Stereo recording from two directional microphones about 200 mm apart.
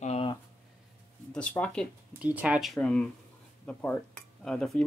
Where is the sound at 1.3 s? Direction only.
5° left (ahead or behind).